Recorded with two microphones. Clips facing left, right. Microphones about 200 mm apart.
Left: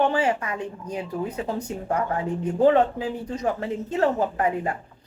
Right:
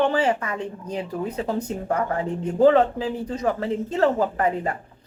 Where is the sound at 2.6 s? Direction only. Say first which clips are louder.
Right 2 dB; 35° right (ahead or behind).